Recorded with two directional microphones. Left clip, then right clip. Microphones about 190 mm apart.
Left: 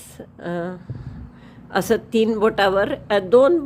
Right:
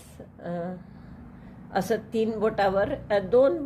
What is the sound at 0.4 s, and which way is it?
A woman's voice, 30° left (ahead or behind).